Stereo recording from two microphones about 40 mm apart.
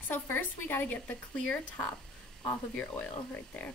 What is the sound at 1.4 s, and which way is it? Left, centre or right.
Speech, left.